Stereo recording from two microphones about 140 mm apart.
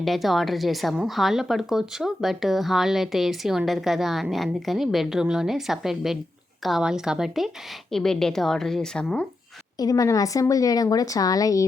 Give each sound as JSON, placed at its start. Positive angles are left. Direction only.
{"t": 0.0, "sound": "speech", "side_deg": 0}
{"t": 9.7, "sound": "speech", "side_deg": 25}